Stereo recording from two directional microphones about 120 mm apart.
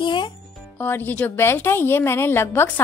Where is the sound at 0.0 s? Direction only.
40° left (ahead or behind).